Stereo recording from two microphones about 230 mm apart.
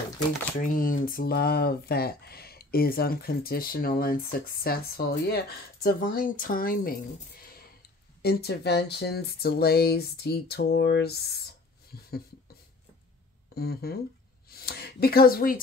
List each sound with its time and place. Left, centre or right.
0.6 s speech: left
13.6 s speech: left